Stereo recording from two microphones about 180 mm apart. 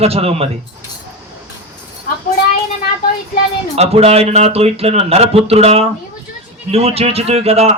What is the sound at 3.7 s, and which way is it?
A man's voice, 35° right (ahead or behind).